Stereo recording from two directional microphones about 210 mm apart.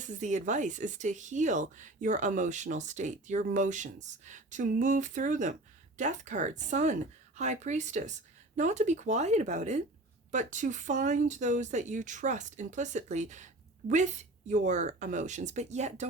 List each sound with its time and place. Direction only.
0.0 s speech: 35° right (ahead or behind)